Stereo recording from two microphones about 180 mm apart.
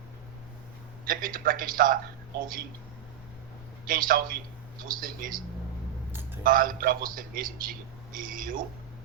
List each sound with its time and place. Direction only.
1.0 s a man's voice: 50° right (ahead or behind)
3.8 s a man's voice: 50° right (ahead or behind)
6.4 s a man's voice: 50° right (ahead or behind)